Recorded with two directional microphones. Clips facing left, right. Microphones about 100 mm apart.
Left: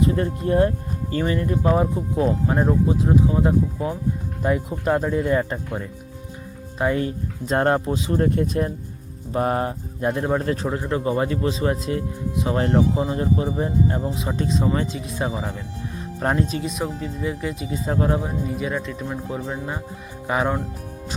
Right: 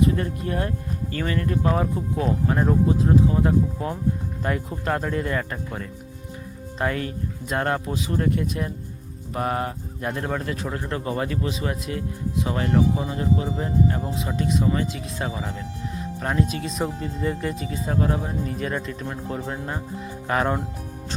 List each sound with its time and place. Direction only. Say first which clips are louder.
0.0 s speech: left 1 dB; 30° left (ahead or behind)
6.9 s speech: left 4 dB; 30° left (ahead or behind)
10.4 s speech: left 5 dB; 35° left (ahead or behind)
10.7 s speech: left 4 dB; 20° left (ahead or behind)
16.2 s speech: left 3 dB; 30° left (ahead or behind)
16.7 s speech: even; centre (ahead or behind)
17.7 s speech: left 4 dB; 25° left (ahead or behind)
18.4 s speech: left 2 dB; 5° left (ahead or behind)